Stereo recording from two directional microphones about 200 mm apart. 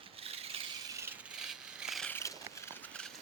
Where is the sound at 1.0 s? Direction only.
5° right (ahead or behind); by 2.3 s 10° left (ahead or behind).